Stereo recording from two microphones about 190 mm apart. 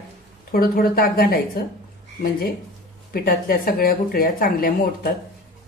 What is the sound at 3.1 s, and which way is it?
A woman's voice, 50° left (ahead or behind).